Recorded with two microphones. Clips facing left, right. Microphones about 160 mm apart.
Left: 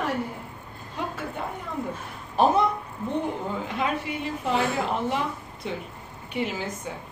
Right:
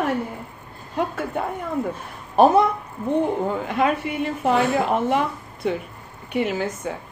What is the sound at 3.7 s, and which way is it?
A woman's voice, 55° right (ahead or behind).